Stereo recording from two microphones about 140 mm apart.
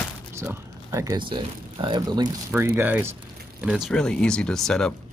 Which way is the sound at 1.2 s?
35° right (ahead or behind).